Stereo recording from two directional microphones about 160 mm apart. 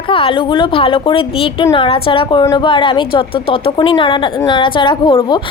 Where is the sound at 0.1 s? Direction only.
35° left (ahead or behind).